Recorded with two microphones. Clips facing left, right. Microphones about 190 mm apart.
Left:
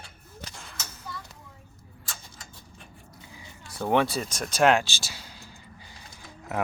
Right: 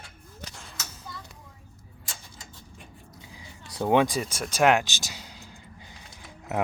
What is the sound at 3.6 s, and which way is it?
Speech, 15° right (ahead or behind).